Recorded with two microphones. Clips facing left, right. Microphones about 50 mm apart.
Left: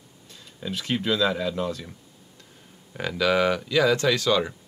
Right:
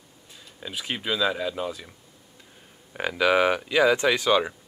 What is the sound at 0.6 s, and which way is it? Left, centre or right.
Speech, centre.